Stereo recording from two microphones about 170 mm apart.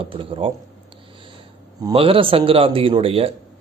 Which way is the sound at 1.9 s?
30° right (ahead or behind).